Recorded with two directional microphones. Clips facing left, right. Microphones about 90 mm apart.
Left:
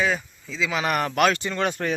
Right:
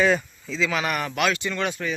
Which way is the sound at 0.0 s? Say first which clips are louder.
Right 4 dB; centre (ahead or behind).